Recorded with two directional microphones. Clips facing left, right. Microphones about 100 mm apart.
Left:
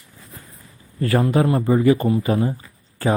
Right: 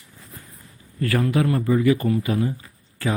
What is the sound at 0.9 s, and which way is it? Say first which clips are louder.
Speech: left 3 dB; 30° left (ahead or behind).